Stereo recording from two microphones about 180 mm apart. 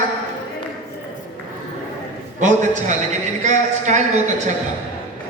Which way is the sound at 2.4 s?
45° right (ahead or behind).